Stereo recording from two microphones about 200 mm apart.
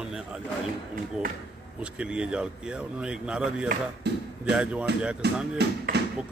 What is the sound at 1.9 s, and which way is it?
Speech, 5° right (ahead or behind).